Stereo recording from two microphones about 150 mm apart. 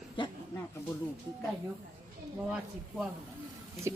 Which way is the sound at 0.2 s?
35° left (ahead or behind).